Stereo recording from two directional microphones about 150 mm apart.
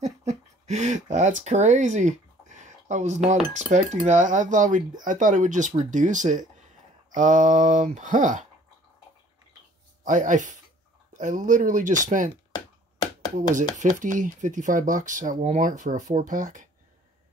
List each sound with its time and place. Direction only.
0.0 s a sound: 50° right (ahead or behind)
3.5 s speech: 50° right (ahead or behind)
10.0 s speech: 55° right (ahead or behind)
12.5 s finger snapping: 25° left (ahead or behind)
13.7 s speech: 60° right (ahead or behind)